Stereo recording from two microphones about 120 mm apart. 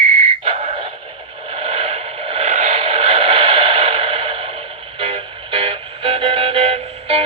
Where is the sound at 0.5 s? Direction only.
80° right.